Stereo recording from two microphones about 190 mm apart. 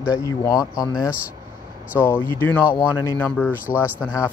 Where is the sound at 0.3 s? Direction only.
20° left (ahead or behind).